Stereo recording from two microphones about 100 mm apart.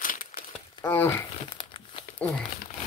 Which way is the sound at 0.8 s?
20° left (ahead or behind).